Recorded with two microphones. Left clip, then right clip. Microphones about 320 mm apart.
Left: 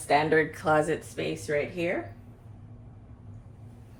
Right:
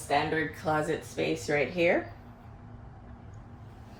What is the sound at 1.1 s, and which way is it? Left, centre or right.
Speech, centre.